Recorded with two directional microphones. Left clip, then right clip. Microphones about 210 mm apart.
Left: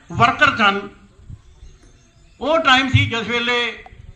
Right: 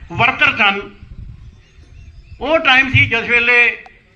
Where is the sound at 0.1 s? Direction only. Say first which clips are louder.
Right 1 dB; 55° left (ahead or behind).